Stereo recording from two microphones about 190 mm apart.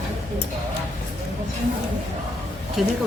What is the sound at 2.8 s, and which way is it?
Speech, centre (ahead or behind).